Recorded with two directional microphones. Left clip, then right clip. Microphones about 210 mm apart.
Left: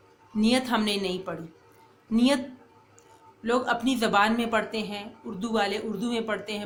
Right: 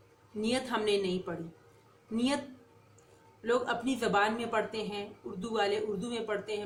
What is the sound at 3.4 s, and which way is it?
Speech, 50° left (ahead or behind).